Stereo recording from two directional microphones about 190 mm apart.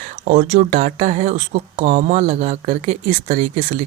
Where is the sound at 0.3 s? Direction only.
40° right (ahead or behind).